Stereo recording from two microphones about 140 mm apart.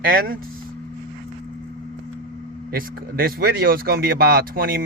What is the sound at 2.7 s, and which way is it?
Speech, 90° right.